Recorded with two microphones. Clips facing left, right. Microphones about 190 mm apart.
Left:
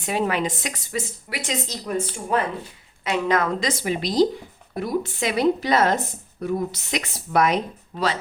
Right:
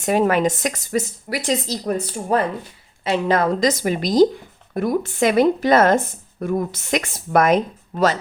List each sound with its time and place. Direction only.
0.0 s a woman's voice: 45° right (ahead or behind)